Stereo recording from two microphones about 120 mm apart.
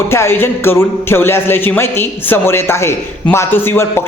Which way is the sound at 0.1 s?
20° left (ahead or behind).